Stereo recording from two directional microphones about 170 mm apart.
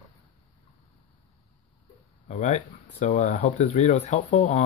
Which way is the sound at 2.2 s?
45° left (ahead or behind).